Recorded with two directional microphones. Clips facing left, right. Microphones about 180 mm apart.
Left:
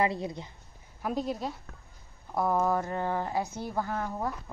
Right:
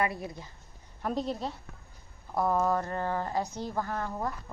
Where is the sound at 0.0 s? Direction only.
20° left (ahead or behind).